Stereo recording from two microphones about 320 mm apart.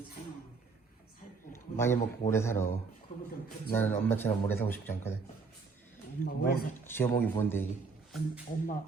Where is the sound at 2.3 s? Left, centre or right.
Centre.